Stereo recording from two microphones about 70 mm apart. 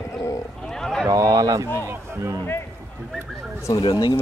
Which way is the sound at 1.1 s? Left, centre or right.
Right.